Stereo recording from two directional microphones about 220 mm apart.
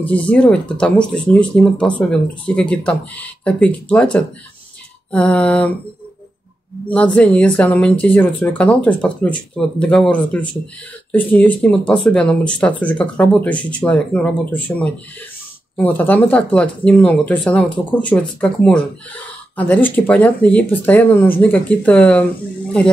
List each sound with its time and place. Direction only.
0.0 s speech: 5° left (ahead or behind)
6.9 s speech: 5° left (ahead or behind)
15.9 s speech: 5° left (ahead or behind)